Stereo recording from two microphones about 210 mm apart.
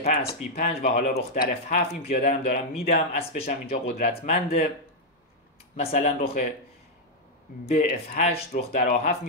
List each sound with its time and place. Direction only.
0.0 s speech: 40° left (ahead or behind)
1.5 s speech: 35° left (ahead or behind)
3.6 s speech: 45° left (ahead or behind)
4.1 s speech: 30° left (ahead or behind)
5.8 s speech: 30° left (ahead or behind)
8.1 s speech: 35° left (ahead or behind)